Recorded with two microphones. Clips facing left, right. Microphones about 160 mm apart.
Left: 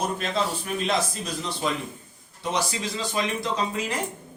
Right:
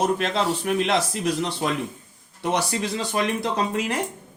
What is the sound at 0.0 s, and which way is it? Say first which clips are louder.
A man's voice: right 4 dB; 75° right (ahead or behind).